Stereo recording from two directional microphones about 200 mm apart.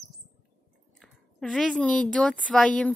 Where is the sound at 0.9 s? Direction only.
Centre (ahead or behind).